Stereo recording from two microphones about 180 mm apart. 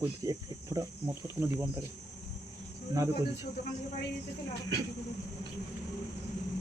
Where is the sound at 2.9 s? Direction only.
15° right (ahead or behind).